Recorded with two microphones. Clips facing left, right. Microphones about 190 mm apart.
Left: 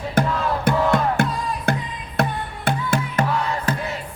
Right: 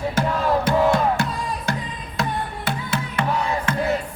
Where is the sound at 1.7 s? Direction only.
55° left (ahead or behind).